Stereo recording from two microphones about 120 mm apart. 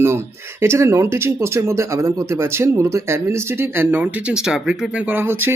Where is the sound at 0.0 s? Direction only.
20° right (ahead or behind).